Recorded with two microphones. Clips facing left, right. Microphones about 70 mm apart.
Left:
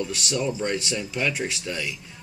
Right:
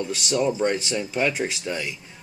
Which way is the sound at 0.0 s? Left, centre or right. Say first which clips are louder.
Right 3 dB; centre.